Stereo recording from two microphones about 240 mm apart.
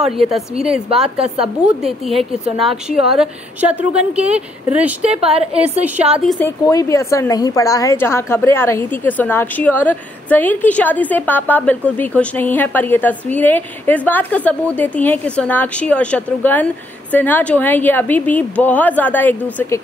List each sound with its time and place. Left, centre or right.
0.0 s a woman's voice: centre
5.0 s a woman's voice: right
6.2 s a woman's voice: centre
6.7 s a woman's voice: centre